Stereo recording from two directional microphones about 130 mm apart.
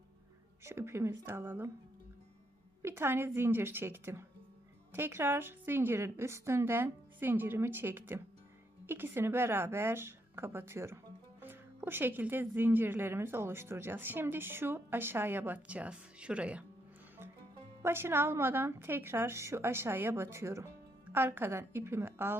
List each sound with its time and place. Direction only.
0.6 s a woman's voice: 20° right (ahead or behind)
2.8 s a woman's voice: 20° right (ahead or behind)
17.8 s a woman's voice: 20° right (ahead or behind)